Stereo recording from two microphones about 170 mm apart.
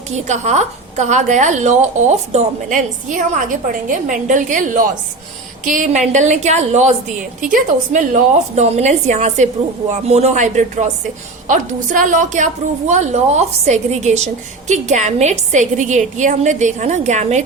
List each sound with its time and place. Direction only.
0.3 s a woman's voice: 40° right (ahead or behind)